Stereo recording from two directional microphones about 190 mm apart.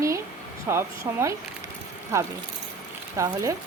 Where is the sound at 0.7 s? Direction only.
15° right (ahead or behind).